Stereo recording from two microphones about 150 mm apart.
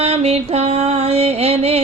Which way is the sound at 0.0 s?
45° right (ahead or behind).